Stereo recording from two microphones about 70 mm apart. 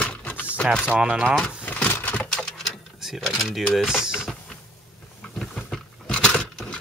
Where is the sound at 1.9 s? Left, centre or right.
Left.